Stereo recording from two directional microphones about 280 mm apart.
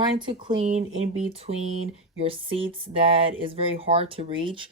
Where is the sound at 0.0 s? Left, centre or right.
Centre.